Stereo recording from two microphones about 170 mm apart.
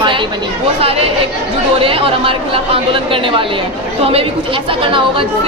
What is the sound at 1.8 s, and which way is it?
Speech, 35° right (ahead or behind).